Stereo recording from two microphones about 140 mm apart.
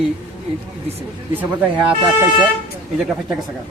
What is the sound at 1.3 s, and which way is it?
Speech, 10° right (ahead or behind).